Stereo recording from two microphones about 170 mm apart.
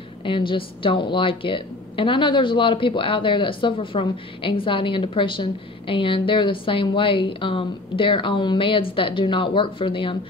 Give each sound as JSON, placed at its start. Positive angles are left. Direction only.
{"t": 0.2, "sound": "a woman's voice", "side_deg": 30}